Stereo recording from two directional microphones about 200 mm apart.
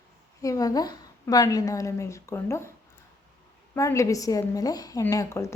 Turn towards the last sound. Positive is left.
turn(degrees=15)  # may be behind; listen again after turning